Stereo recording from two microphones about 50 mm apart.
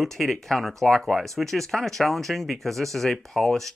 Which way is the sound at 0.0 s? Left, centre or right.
Centre.